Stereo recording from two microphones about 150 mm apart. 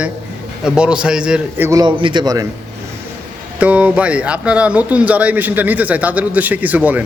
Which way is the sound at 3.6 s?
10° right (ahead or behind).